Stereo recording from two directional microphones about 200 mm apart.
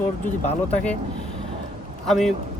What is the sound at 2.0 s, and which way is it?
Speech, centre (ahead or behind).